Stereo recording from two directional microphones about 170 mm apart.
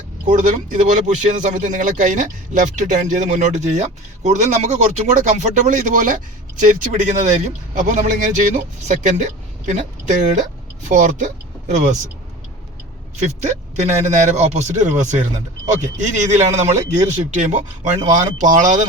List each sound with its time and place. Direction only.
0.3 s speech: 45° right (ahead or behind)
13.1 s speech: 45° right (ahead or behind)